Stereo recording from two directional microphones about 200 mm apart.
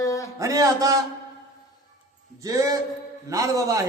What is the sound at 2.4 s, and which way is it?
A man's voice, 15° right (ahead or behind).